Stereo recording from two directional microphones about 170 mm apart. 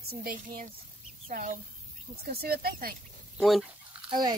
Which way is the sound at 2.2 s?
65° right (ahead or behind).